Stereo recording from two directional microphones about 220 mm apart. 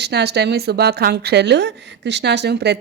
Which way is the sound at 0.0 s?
50° right (ahead or behind).